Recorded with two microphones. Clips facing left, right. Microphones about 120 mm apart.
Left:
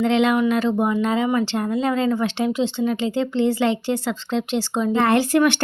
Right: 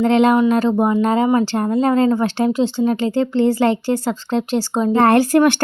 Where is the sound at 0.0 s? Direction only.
40° right (ahead or behind).